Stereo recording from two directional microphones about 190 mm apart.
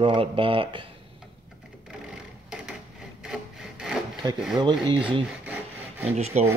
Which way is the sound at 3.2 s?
5° right (ahead or behind).